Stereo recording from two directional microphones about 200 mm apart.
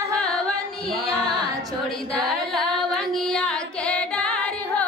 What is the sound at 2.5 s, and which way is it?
Singing, centre (ahead or behind).